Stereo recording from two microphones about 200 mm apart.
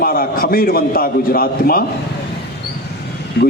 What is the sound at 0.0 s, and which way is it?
A man's voice, 50° left (ahead or behind).